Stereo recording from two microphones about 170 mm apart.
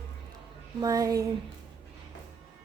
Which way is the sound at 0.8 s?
20° right (ahead or behind).